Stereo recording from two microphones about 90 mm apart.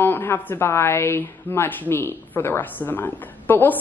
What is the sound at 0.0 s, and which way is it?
A woman's voice, 25° left (ahead or behind).